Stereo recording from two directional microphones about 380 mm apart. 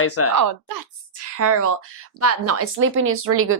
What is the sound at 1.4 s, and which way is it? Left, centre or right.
A woman's voice, right.